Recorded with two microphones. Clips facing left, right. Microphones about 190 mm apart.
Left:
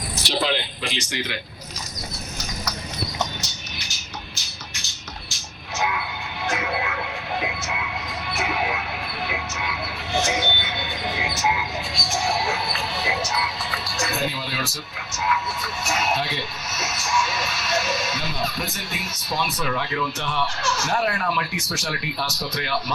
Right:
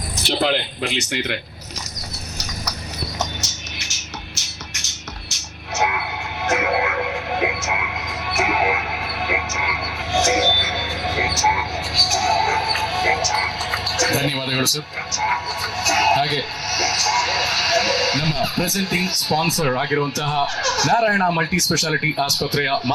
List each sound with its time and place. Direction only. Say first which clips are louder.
0.3 s speech: right 4 dB; 55° right (ahead or behind)
3.4 s music: right 2 dB; 90° right
5.8 s music: right 4 dB; 50° right (ahead or behind)
6.7 s a sound: right 6 dB; 50° right (ahead or behind)
7.3 s music: right 4 dB; 75° right (ahead or behind)
10.4 s music: right 5 dB; 45° right (ahead or behind)
11.0 s frog: right 5 dB; 80° right
11.3 s frog: right 1 dB; 40° right (ahead or behind)
11.9 s music: right 4 dB; 80° right
14.0 s a sound: right 6 dB; 80° right
19.5 s speech: right 7 dB; 70° right (ahead or behind)